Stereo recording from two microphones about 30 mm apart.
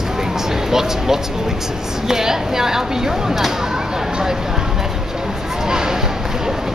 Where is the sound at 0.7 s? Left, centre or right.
Centre.